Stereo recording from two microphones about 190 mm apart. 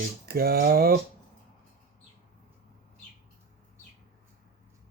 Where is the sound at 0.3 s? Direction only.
55° right (ahead or behind).